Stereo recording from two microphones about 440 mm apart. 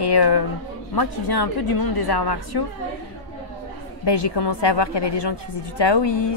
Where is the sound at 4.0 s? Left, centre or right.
Left.